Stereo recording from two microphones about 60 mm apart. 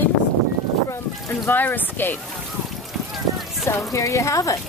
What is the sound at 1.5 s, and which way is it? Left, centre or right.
Speech, left.